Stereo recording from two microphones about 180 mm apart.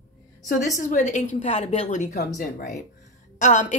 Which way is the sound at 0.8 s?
45° left (ahead or behind).